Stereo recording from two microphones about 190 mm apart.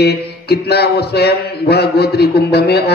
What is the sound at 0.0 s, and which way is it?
A man's voice, 60° left (ahead or behind).